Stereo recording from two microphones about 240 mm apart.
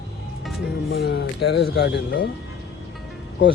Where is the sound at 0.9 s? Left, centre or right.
Left.